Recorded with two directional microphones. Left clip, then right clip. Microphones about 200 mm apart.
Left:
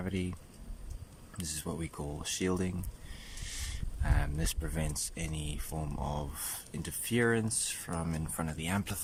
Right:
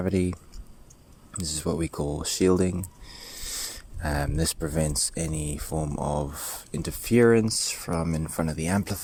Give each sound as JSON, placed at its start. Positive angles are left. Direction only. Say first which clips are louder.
{"t": 0.0, "sound": "speech", "louder": "right 12 dB", "side_deg": -30}
{"t": 1.4, "sound": "speech", "louder": "right 11 dB", "side_deg": -25}